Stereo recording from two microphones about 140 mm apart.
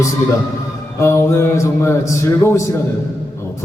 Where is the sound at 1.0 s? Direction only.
20° left (ahead or behind).